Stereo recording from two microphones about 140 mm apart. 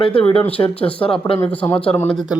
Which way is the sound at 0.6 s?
30° left (ahead or behind).